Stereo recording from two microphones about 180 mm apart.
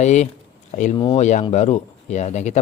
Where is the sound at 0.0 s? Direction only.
40° left (ahead or behind).